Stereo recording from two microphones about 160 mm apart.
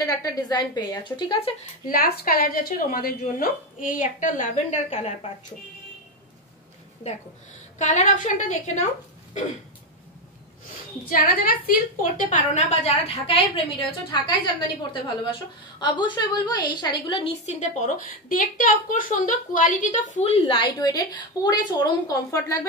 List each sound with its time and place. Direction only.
0.0 s a woman's voice: 20° left (ahead or behind)
1.9 s a woman's voice: 65° left (ahead or behind); by 5.1 s 45° left (ahead or behind)
7.8 s a woman's voice: 50° left (ahead or behind)
11.1 s a woman's voice: 65° left (ahead or behind); by 17.3 s 30° left (ahead or behind)
17.5 s a woman's voice: 50° left (ahead or behind); by 22.7 s 15° left (ahead or behind)